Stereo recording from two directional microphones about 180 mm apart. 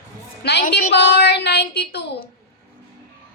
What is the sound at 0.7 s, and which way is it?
A woman's voice, 65° left (ahead or behind).